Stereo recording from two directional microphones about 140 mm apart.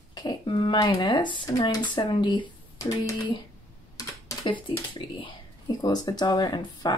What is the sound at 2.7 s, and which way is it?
Speech, 20° left (ahead or behind).